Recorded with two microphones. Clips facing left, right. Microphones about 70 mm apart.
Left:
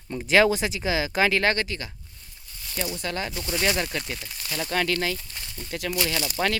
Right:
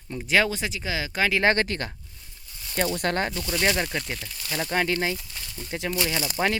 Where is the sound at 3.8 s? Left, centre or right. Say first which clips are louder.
Right 1 dB; centre.